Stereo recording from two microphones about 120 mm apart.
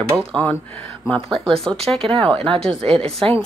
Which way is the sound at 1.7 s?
5° left (ahead or behind).